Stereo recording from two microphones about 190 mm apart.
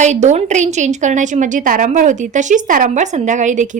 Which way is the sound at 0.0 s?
40° right (ahead or behind).